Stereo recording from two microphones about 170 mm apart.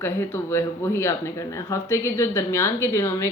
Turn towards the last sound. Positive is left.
turn(degrees=15)  # may be behind; listen again after turning